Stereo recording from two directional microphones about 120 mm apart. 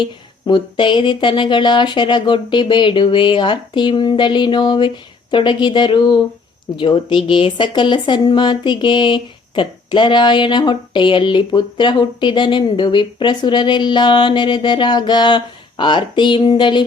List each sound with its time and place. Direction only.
0.0 s a woman's voice: 40° left (ahead or behind)